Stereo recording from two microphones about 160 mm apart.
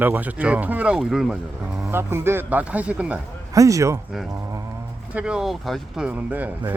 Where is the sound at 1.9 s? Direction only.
15° right (ahead or behind).